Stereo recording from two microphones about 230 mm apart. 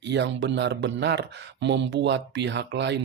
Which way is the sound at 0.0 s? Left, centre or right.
Right.